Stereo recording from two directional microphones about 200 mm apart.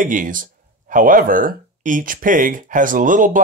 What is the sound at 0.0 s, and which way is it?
Speech, 40° right (ahead or behind).